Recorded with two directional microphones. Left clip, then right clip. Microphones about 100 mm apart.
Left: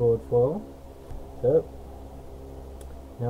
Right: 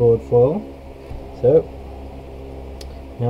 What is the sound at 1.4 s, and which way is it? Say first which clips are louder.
Speech: right 8 dB; 20° right (ahead or behind).